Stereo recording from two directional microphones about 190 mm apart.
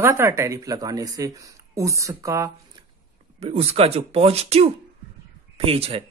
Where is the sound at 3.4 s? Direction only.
30° right (ahead or behind).